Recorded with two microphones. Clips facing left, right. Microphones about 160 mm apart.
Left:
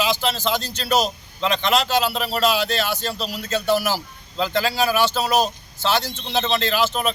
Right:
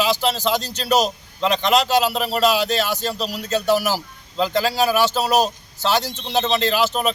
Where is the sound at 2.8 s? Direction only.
40° right (ahead or behind).